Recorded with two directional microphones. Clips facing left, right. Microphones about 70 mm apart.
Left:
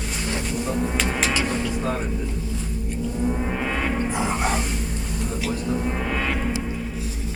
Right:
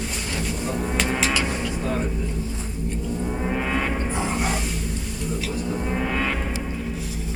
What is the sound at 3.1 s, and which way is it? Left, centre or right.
Gong, centre.